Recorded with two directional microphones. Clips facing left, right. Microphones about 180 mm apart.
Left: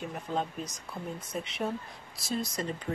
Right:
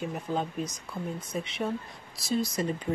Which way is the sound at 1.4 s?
Centre (ahead or behind).